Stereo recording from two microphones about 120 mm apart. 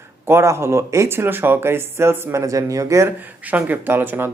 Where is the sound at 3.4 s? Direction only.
15° right (ahead or behind).